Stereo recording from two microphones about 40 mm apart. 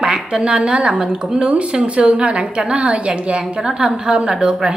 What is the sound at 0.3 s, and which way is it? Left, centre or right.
A woman's voice, right.